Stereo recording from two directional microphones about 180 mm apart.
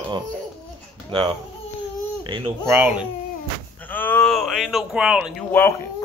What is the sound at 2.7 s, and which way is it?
Speech, 10° right (ahead or behind).